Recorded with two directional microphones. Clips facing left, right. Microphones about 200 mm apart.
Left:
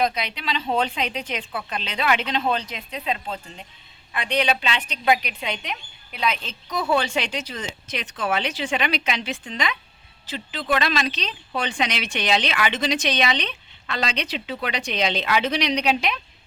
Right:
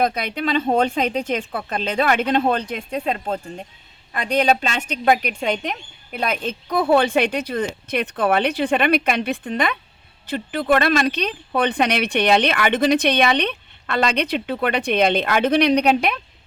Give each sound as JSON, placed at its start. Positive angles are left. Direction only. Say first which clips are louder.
{"t": 0.0, "sound": "speech", "louder": "right 4 dB", "side_deg": -50}